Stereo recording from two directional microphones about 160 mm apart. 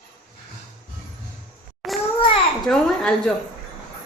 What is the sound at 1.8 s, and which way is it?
A woman's voice, centre (ahead or behind).